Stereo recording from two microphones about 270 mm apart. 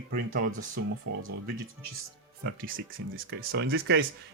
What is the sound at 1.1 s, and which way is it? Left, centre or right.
Speech, right.